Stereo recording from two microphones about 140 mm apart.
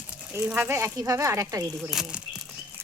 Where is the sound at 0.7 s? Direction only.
20° right (ahead or behind).